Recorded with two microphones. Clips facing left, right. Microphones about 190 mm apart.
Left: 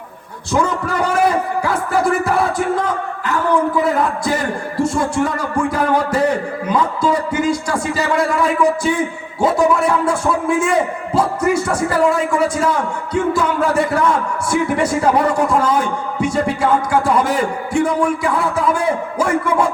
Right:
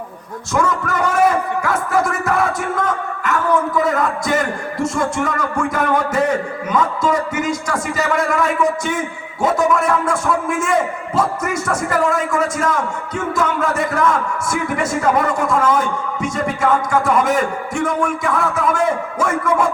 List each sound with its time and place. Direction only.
0.5 s a man's voice: 30° left (ahead or behind)